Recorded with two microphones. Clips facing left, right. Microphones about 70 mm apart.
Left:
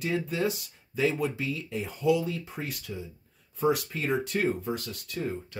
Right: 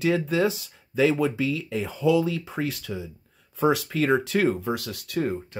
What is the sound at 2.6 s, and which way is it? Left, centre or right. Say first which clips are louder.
Speech: right 7 dB; right.